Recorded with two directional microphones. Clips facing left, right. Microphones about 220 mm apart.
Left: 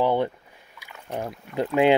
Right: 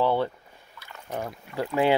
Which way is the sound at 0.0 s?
15° left (ahead or behind).